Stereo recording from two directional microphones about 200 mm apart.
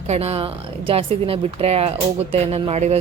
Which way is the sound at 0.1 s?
30° right (ahead or behind).